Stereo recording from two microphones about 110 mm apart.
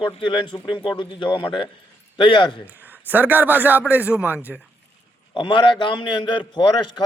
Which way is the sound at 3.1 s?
15° right (ahead or behind).